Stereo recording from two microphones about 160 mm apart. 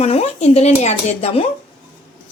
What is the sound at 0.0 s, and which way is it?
A woman's voice, 40° left (ahead or behind).